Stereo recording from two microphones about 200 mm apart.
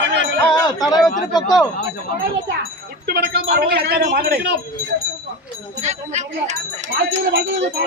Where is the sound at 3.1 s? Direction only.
55° right (ahead or behind).